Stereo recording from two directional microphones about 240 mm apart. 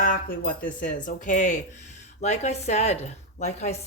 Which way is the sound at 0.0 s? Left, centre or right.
Left.